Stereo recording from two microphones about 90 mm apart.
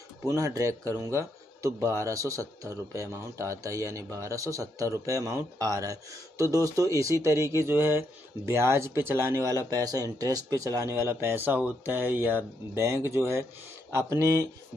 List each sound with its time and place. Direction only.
0.2 s a man's voice: 35° right (ahead or behind)